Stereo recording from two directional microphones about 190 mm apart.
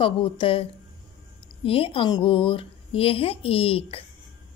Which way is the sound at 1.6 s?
30° left (ahead or behind).